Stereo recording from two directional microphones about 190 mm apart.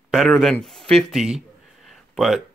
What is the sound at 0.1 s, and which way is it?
Speech, centre (ahead or behind).